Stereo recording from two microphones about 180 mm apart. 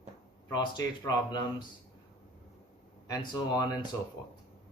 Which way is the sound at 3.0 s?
20° left (ahead or behind).